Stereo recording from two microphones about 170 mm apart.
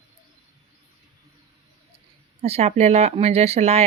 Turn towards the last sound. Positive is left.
turn(degrees=-40)  # may be behind; listen again after turning